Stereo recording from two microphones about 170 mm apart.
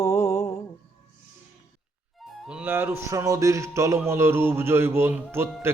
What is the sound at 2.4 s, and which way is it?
Speech, 10° right (ahead or behind).